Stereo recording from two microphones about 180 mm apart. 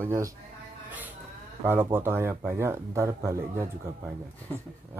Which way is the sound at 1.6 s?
10° right (ahead or behind).